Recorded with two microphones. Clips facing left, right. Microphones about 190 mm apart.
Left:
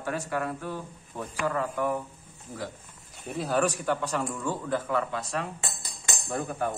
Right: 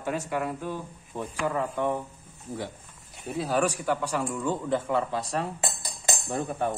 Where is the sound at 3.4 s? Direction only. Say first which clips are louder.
Even; 10° right (ahead or behind).